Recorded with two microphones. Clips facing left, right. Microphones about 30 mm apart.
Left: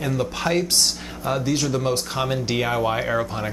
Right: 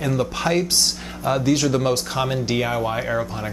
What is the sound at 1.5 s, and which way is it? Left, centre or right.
Speech, right.